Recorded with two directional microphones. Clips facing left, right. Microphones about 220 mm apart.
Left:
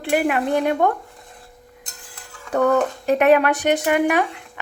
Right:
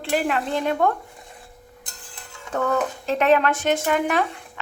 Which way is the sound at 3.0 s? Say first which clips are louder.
Left 3 dB; 15° left (ahead or behind).